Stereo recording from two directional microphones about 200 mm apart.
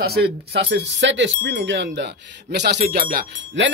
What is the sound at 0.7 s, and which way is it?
Speech, 65° right (ahead or behind).